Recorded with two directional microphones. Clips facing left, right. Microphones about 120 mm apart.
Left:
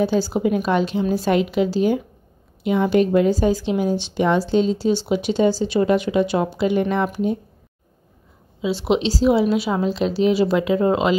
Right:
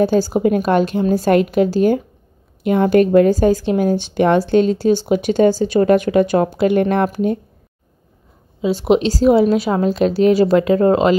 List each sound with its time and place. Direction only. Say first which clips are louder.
0.0 s a woman's voice: right 4 dB; 45° right (ahead or behind)
8.5 s a woman's voice: right 5 dB; 45° right (ahead or behind)